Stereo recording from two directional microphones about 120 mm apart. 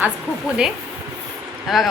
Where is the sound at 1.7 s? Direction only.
Centre (ahead or behind).